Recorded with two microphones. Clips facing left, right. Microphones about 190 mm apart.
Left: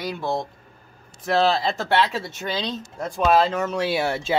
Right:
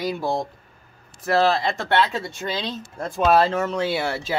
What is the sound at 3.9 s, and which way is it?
Speech, 20° left (ahead or behind).